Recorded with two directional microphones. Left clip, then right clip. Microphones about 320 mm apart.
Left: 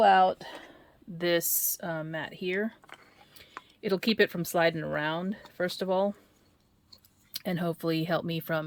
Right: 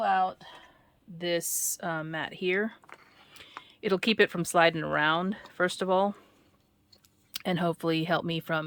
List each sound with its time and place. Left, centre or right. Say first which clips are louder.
0.3 s speech: left 5 dB; left
1.2 s speech: left 2 dB; centre
7.3 s speech: right 3 dB; centre